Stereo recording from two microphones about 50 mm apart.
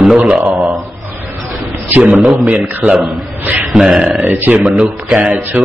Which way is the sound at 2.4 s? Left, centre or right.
Right.